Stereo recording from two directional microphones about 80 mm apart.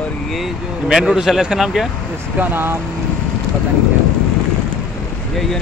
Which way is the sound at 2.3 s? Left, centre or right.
Right.